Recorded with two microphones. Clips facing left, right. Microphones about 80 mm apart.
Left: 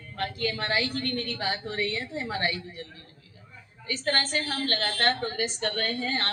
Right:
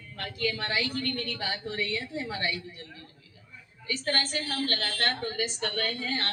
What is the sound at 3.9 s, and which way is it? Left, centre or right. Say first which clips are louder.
A woman's voice: left 2 dB; left.